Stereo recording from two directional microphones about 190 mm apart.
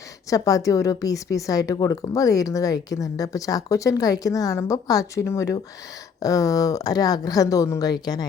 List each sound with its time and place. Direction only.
0.3 s a woman's voice: 20° left (ahead or behind)